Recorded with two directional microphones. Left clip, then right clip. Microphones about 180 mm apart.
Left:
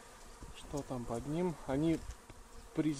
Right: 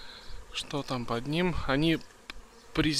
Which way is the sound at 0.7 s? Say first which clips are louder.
Right 6 dB; 5° right (ahead or behind).